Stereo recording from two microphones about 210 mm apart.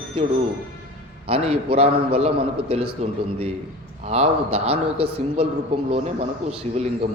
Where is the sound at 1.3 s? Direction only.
30° right (ahead or behind).